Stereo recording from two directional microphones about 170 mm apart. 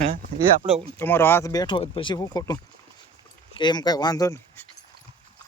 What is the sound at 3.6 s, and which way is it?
Speech, 25° left (ahead or behind).